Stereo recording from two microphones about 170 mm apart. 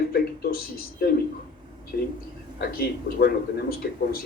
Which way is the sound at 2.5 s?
65° left (ahead or behind).